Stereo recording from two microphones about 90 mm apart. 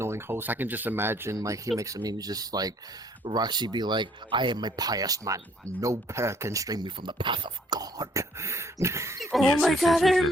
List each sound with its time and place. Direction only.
0.0 s speech: 30° right (ahead or behind)
1.4 s speech: 35° right (ahead or behind)
6.8 s speech: 60° right (ahead or behind); by 9.2 s 35° right (ahead or behind)
9.6 s speech: centre (ahead or behind)